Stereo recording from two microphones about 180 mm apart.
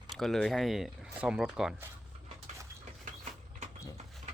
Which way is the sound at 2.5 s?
40° right (ahead or behind).